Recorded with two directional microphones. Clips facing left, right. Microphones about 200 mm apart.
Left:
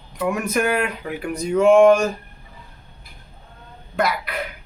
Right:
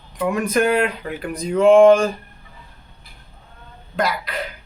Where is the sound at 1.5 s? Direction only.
30° right (ahead or behind).